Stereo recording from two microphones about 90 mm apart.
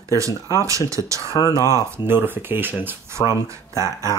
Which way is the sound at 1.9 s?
25° right (ahead or behind).